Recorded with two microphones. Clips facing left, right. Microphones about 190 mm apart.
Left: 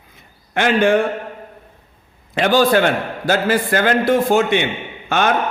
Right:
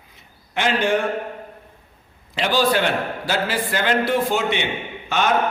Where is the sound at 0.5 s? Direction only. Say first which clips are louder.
Left 5 dB; 50° left (ahead or behind).